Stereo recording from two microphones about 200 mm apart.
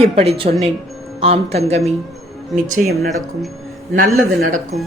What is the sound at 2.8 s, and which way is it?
Speech, centre (ahead or behind).